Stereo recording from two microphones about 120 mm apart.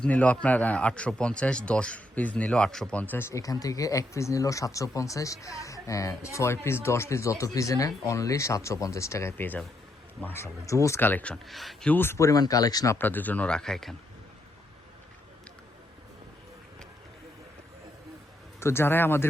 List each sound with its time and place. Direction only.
0.0 s a man's voice: 10° left (ahead or behind)
11.4 s speech: centre (ahead or behind)
11.9 s a man's voice: 20° left (ahead or behind)
13.0 s speech: 15° left (ahead or behind)
18.6 s a man's voice: 20° left (ahead or behind)